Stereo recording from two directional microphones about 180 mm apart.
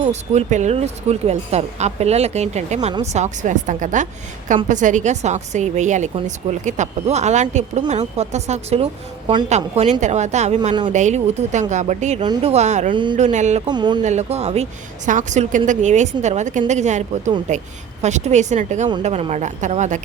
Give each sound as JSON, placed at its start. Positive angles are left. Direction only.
{"t": 0.0, "sound": "a woman's voice", "side_deg": -40}
{"t": 12.9, "sound": "speech", "side_deg": -25}
{"t": 13.1, "sound": "a woman's voice", "side_deg": -40}
{"t": 13.7, "sound": "speech", "side_deg": -25}
{"t": 14.0, "sound": "a woman's voice", "side_deg": -40}